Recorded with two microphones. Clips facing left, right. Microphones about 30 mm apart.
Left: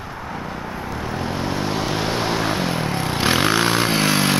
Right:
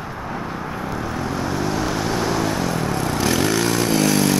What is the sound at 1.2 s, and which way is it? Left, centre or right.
Vehicle, left.